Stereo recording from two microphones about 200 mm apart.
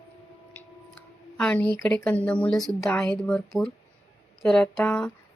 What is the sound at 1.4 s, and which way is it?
Speech, 5° left (ahead or behind).